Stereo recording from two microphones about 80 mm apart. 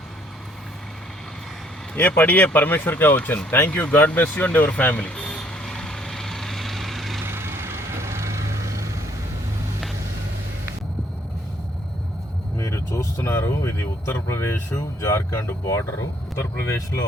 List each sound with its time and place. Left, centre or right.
2.0 s speech: left; by 7.2 s centre
7.3 s vehicle: right
12.5 s vehicle: left
13.3 s speech: left